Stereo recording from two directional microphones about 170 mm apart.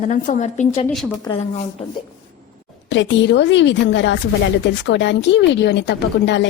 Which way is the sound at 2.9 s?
90° left.